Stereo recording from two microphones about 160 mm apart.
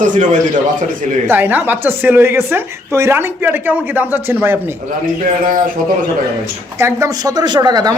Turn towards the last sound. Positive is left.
turn(degrees=-25)  # may be behind; listen again after turning